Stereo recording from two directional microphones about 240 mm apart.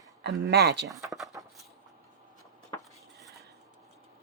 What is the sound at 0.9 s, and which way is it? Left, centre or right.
Speech, centre.